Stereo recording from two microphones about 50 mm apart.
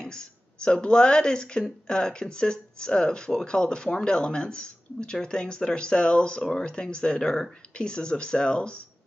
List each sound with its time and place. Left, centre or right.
0.0 s speech: centre